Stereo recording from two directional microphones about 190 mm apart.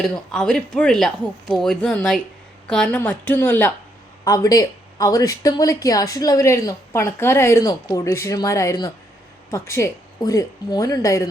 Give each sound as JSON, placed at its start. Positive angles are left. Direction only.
{"t": 0.0, "sound": "a man's voice", "side_deg": 5}